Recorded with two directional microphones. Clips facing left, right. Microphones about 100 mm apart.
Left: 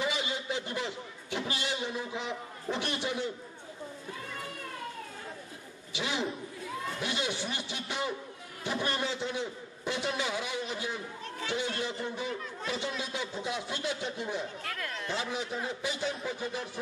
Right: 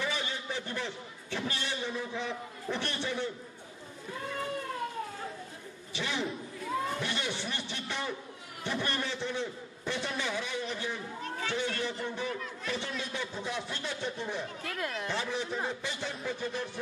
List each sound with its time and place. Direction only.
0.0 s a man's voice: 15° left (ahead or behind)
5.9 s a sound: 15° left (ahead or behind)
7.0 s a man's voice: 15° left (ahead or behind)
14.6 s speech: 20° right (ahead or behind)
15.0 s a man's voice: 20° left (ahead or behind)